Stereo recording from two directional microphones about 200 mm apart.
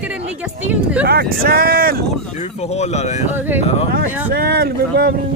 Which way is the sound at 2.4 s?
35° left (ahead or behind).